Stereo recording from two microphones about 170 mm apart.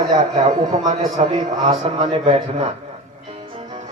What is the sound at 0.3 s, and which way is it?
Speech, 45° right (ahead or behind).